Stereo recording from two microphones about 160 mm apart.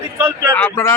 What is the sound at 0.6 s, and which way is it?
Speech, 15° left (ahead or behind).